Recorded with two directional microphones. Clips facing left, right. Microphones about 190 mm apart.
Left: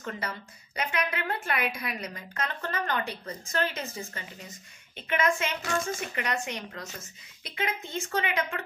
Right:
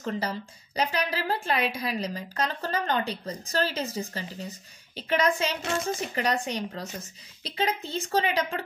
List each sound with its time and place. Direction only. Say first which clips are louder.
0.0 s a woman's voice: right 5 dB; 35° right (ahead or behind)